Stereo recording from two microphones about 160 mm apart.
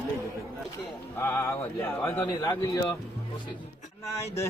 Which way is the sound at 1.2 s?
15° left (ahead or behind).